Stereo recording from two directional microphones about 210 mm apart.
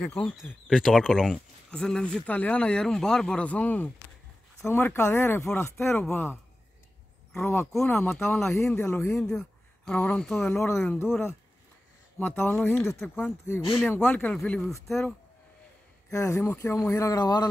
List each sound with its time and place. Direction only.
0.0 s speech: 5° left (ahead or behind)
7.3 s speech: 10° left (ahead or behind)
16.1 s speech: 15° left (ahead or behind)
17.0 s a man's voice: 20° left (ahead or behind)